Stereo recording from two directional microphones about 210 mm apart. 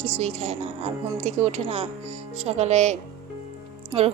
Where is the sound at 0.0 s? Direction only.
30° right (ahead or behind).